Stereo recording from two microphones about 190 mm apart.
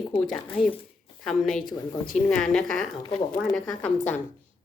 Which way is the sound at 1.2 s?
Centre (ahead or behind).